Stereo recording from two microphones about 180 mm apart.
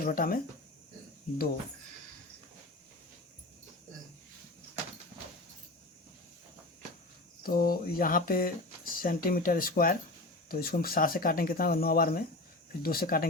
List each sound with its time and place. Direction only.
0.0 s speech: 50° left (ahead or behind)
7.4 s speech: 55° left (ahead or behind)